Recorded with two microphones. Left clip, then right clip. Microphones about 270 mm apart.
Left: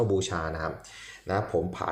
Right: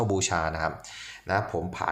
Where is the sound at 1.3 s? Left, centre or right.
Centre.